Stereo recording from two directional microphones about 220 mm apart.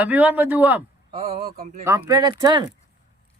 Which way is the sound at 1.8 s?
15° right (ahead or behind).